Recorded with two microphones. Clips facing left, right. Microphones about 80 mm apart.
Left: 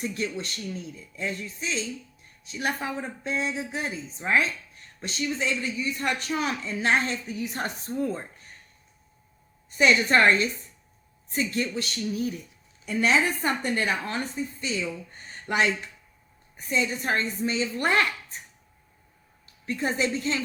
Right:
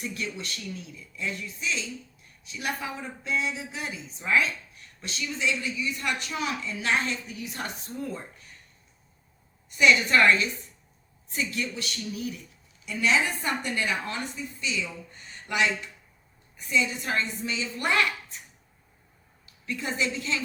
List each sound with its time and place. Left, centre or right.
0.0 s speech: left
9.6 s speech: left
15.1 s a sound: left
16.6 s speech: left
19.6 s speech: left